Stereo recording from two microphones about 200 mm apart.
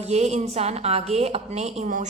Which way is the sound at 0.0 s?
35° right (ahead or behind).